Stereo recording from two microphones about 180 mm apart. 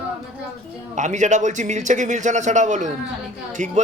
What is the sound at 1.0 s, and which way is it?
A man's voice, 40° right (ahead or behind).